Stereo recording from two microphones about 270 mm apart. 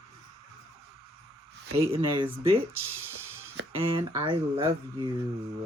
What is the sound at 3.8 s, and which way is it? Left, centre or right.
Speech, centre.